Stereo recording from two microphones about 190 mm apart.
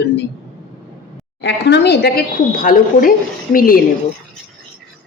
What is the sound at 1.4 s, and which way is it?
Speech, 65° left (ahead or behind).